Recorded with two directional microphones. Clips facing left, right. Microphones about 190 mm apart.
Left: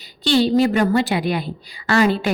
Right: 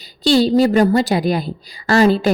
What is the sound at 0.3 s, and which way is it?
A woman's voice, 35° right (ahead or behind).